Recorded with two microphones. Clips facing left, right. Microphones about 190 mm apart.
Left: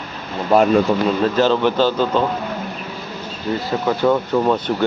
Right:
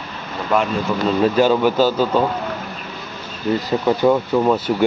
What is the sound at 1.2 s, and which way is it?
Speech, 10° right (ahead or behind).